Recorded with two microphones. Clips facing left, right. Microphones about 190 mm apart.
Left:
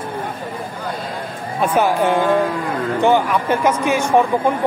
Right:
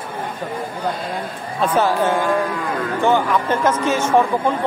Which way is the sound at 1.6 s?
10° left (ahead or behind).